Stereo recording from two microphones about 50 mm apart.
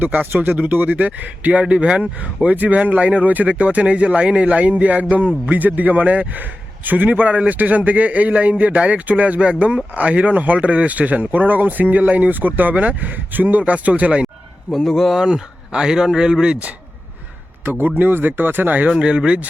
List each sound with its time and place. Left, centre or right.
0.0 s a man's voice: right
1.6 s a man's voice: centre
14.7 s speech: centre
15.2 s speech: centre
17.7 s a man's voice: right
18.9 s a man's voice: centre